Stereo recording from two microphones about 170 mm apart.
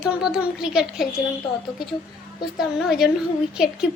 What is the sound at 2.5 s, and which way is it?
Speech, centre (ahead or behind).